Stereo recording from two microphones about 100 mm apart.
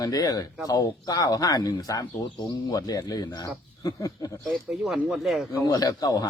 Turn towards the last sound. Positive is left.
turn(degrees=40)  # may be behind; listen again after turning